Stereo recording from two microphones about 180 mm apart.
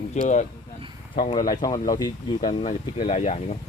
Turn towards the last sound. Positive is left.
turn(degrees=40)  # may be behind; listen again after turning